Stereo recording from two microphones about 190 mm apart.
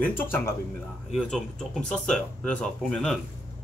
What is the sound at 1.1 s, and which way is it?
Speech, centre (ahead or behind).